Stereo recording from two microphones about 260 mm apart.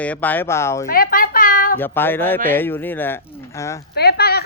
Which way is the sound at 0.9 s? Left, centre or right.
Left.